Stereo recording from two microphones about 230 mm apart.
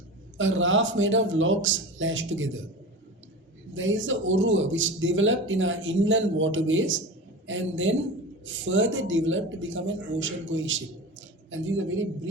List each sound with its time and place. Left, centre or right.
0.3 s a man's voice: right
3.8 s a man's voice: right